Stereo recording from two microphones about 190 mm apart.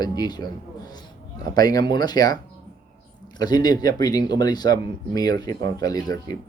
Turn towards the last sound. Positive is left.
turn(degrees=20)  # may be behind; listen again after turning